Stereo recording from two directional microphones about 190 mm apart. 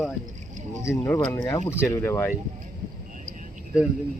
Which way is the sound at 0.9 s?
15° left (ahead or behind).